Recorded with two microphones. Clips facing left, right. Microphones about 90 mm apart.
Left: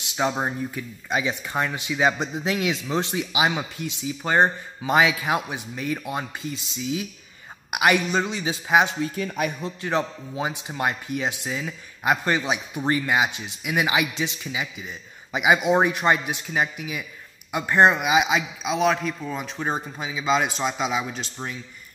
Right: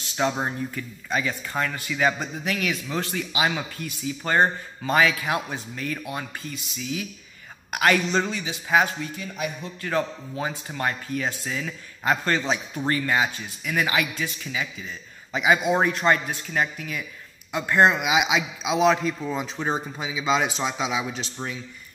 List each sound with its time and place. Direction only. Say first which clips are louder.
0.1 s speech: left 1 dB; 10° left (ahead or behind)
7.7 s speech: left 1 dB; 15° left (ahead or behind)
17.9 s a man's voice: left 2 dB; centre (ahead or behind)